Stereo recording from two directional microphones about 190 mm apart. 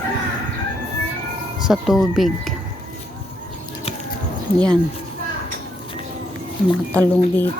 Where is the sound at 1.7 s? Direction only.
Centre (ahead or behind).